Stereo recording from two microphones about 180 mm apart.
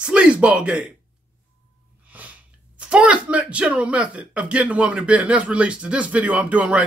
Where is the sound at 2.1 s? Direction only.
10° right (ahead or behind).